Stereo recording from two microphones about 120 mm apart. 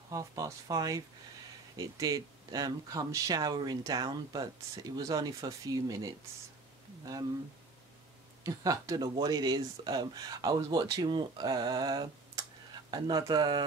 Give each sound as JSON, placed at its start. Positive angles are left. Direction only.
{"t": 0.1, "sound": "speech", "side_deg": -30}
{"t": 8.5, "sound": "speech", "side_deg": -30}